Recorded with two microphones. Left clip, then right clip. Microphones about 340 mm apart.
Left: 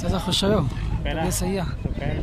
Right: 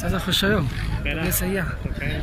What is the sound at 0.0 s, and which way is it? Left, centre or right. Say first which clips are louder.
Speech: right 1 dB; centre.